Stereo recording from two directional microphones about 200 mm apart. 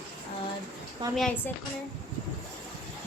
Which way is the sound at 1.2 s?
5° left (ahead or behind).